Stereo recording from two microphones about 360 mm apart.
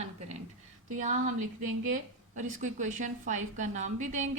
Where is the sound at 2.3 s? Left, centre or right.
Centre.